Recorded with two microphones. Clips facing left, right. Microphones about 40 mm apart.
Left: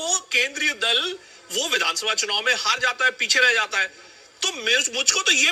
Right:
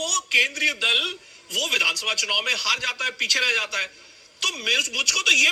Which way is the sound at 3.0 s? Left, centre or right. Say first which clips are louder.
Left 5 dB; centre.